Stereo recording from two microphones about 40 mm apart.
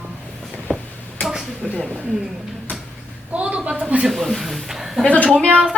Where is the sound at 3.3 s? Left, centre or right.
Right.